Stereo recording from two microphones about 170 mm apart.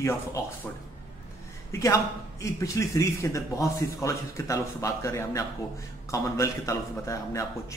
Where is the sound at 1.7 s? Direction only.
20° left (ahead or behind).